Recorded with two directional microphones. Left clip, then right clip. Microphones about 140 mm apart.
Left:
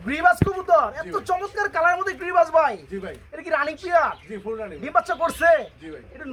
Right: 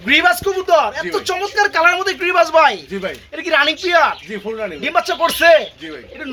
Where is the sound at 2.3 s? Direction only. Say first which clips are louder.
Right 5 dB; centre (ahead or behind).